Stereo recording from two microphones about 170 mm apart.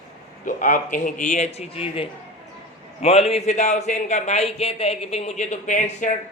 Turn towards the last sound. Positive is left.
turn(degrees=45)  # may be behind; listen again after turning